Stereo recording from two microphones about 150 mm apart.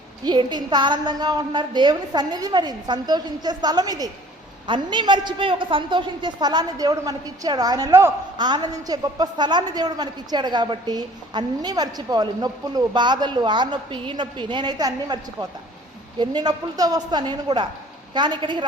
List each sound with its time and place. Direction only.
0.3 s a woman's voice: 30° right (ahead or behind)